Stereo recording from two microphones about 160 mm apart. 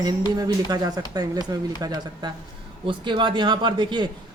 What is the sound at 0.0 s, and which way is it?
A man's voice, 25° right (ahead or behind).